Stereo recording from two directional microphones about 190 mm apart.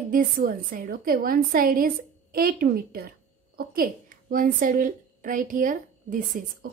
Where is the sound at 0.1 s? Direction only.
45° right (ahead or behind).